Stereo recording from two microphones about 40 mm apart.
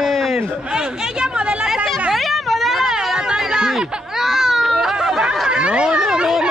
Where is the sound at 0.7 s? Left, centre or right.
Centre.